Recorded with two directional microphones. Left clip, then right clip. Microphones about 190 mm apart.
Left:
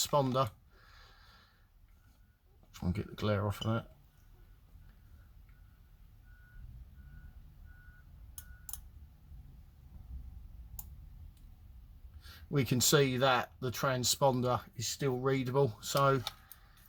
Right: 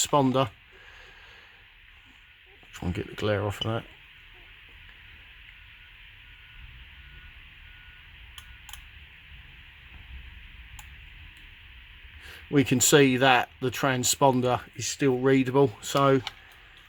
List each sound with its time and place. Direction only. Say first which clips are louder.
0.1 s speech: right 8 dB; 35° right (ahead or behind)
2.7 s speech: right 8 dB; 30° right (ahead or behind)
12.5 s speech: right 9 dB; 35° right (ahead or behind)